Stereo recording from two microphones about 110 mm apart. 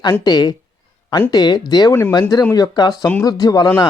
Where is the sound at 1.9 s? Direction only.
20° left (ahead or behind).